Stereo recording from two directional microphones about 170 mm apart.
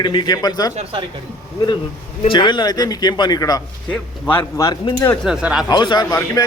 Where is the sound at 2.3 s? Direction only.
25° left (ahead or behind).